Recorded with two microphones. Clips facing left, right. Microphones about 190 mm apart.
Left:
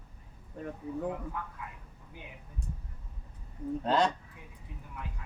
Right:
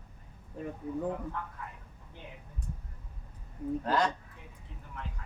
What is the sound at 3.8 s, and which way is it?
Speech, 25° left (ahead or behind).